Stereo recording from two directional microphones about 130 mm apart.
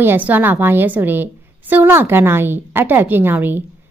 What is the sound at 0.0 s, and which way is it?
A woman's voice, 15° right (ahead or behind).